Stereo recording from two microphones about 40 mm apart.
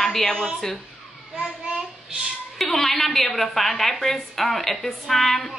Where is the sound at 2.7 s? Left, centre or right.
Centre.